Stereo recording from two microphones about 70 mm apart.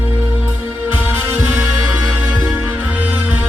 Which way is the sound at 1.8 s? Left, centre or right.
Centre.